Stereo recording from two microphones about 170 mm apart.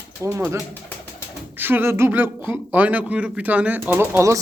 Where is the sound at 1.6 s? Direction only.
10° right (ahead or behind).